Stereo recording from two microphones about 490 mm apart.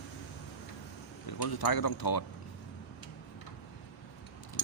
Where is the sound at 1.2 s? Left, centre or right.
Left.